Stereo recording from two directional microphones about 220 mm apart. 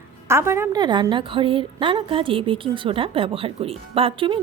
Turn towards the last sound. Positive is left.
turn(degrees=-25)  # may be behind; listen again after turning